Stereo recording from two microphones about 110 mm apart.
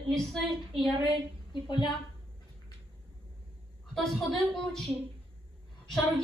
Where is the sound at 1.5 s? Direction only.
45° left (ahead or behind).